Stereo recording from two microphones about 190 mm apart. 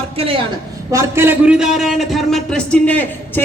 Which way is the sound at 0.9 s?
15° right (ahead or behind).